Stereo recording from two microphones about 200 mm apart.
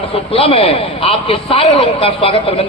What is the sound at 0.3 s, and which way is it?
A man's voice, 30° left (ahead or behind).